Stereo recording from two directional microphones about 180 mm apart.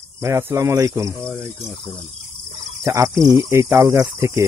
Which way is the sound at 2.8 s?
15° right (ahead or behind).